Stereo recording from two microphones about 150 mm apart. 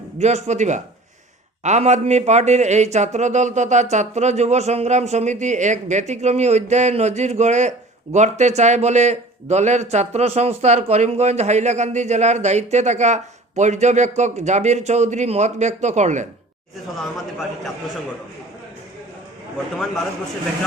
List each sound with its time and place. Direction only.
0.2 s a man's voice: 50° right (ahead or behind)